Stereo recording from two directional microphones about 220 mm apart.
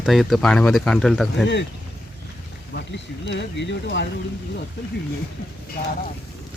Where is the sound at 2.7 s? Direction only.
55° left (ahead or behind).